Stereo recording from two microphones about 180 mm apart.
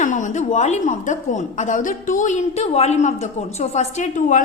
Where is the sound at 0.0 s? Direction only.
45° left (ahead or behind).